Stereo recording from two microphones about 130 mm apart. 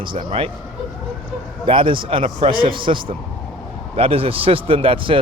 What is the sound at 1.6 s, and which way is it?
Speech, 40° right (ahead or behind).